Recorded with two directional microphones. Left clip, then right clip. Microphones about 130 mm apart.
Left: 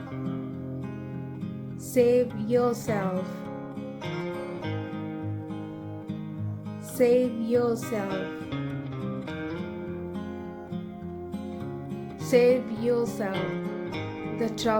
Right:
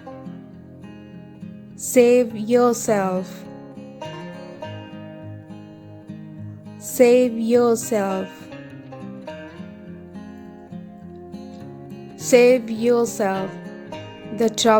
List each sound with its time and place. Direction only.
1.9 s music: 90° right
6.9 s music: 90° right
12.3 s music: 90° right
14.3 s music: 90° right